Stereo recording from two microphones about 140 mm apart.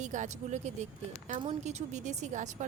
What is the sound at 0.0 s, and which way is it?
A woman's voice, 60° right (ahead or behind).